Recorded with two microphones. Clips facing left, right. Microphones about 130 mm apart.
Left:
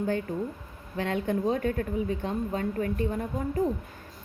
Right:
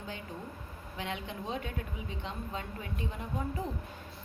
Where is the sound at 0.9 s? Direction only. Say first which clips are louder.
Left 11 dB; 50° left (ahead or behind).